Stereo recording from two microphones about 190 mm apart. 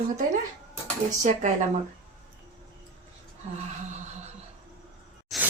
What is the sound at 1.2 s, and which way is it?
Speech, 40° right (ahead or behind).